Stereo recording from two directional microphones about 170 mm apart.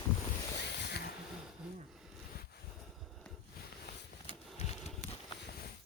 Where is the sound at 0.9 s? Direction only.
75° left (ahead or behind).